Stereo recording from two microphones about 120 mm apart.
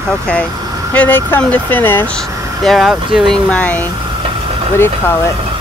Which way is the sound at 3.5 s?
10° left (ahead or behind).